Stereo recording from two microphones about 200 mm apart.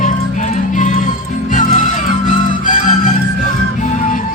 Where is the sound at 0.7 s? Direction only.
40° left (ahead or behind).